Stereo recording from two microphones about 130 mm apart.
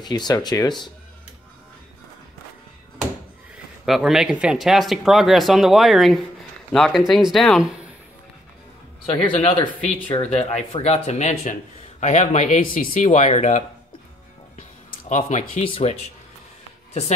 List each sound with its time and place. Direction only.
0.0 s speech: 35° left (ahead or behind)
3.5 s speech: centre (ahead or behind)
9.1 s speech: 40° left (ahead or behind)
10.4 s speech: 55° left (ahead or behind); by 13.2 s 85° left
13.2 s speech: 60° left (ahead or behind)
14.9 s speech: 70° left (ahead or behind)
15.6 s speech: 45° left (ahead or behind)